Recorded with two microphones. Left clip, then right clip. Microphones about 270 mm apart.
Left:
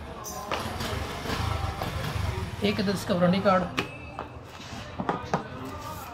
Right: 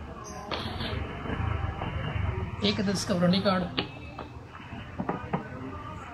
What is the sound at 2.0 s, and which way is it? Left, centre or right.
Speech, centre.